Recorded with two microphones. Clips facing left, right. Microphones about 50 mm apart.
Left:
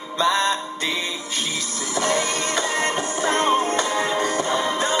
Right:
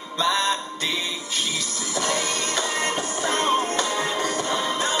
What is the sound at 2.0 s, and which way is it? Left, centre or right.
Music, left.